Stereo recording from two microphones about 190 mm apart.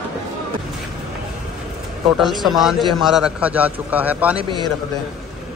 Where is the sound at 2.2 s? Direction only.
Centre (ahead or behind).